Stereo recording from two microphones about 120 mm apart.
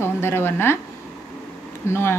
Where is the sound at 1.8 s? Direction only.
20° left (ahead or behind).